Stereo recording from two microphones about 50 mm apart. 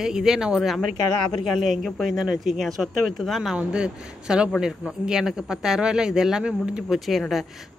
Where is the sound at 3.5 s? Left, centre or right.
Centre.